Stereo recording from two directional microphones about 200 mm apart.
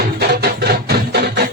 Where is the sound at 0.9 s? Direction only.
55° right (ahead or behind).